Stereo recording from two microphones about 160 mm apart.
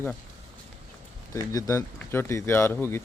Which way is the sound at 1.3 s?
20° left (ahead or behind).